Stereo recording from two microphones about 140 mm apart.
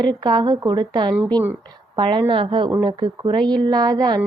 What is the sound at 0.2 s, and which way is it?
Speech, 30° right (ahead or behind).